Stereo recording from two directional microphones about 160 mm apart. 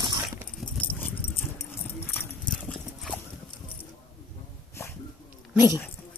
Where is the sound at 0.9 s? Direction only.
15° left (ahead or behind).